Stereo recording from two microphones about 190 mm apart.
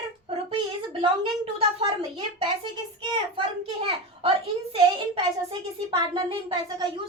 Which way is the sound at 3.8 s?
30° right (ahead or behind).